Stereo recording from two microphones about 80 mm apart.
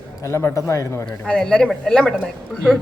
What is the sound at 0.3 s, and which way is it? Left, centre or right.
Speech, left.